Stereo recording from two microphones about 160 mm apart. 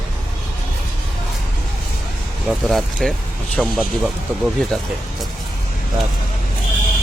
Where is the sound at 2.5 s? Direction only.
5° right (ahead or behind).